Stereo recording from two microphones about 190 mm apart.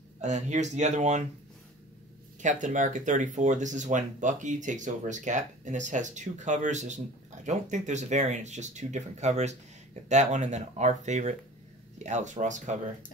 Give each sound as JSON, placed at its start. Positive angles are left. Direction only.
{"t": 0.2, "sound": "speech", "side_deg": -40}
{"t": 2.4, "sound": "speech", "side_deg": -40}